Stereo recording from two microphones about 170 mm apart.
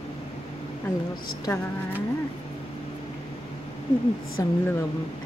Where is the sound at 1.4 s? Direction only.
15° left (ahead or behind).